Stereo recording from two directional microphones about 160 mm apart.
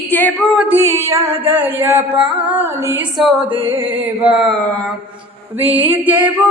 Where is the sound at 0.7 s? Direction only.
15° right (ahead or behind).